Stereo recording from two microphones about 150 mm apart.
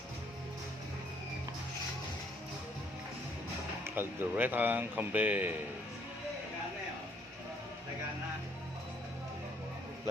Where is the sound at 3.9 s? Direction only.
15° right (ahead or behind).